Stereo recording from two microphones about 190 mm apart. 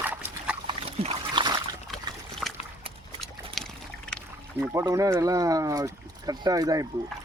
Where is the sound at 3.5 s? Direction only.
5° left (ahead or behind).